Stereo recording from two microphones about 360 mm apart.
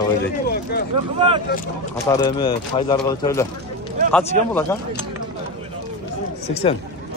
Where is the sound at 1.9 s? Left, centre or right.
Centre.